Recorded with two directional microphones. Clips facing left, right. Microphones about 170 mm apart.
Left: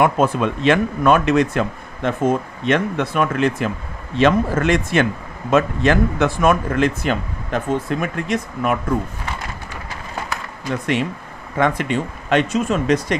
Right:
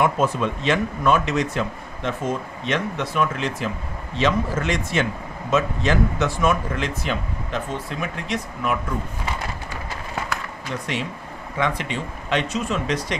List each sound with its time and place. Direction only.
0.0 s speech: 60° left (ahead or behind)
11.5 s speech: 50° left (ahead or behind)